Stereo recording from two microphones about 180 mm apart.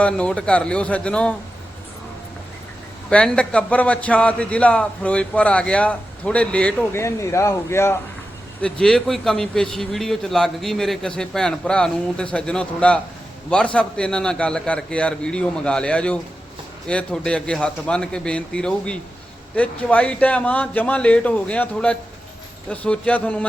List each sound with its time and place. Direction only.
0.0 s a man's voice: 5° left (ahead or behind)
3.1 s a man's voice: 5° left (ahead or behind)
8.6 s a man's voice: 5° left (ahead or behind)